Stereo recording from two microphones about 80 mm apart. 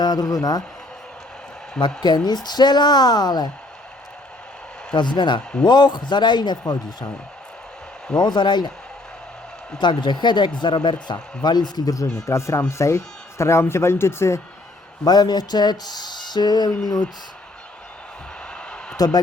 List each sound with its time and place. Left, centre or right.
0.0 s speech: left
2.0 s speech: left
4.9 s speech: left
8.2 s speech: left
9.7 s speech: left
15.0 s speech: left
18.9 s speech: left